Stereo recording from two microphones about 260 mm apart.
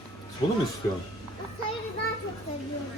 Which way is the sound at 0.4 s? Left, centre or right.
Centre.